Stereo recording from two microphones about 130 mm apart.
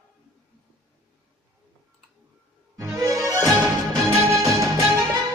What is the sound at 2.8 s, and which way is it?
Music, 25° right (ahead or behind).